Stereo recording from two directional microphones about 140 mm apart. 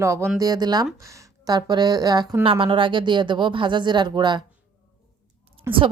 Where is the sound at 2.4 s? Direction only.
40° right (ahead or behind).